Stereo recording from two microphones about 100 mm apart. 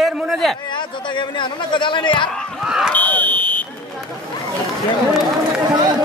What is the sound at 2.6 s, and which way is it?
Smoke detector, 5° right (ahead or behind).